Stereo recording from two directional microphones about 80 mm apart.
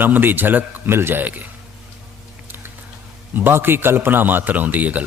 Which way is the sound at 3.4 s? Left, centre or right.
Right.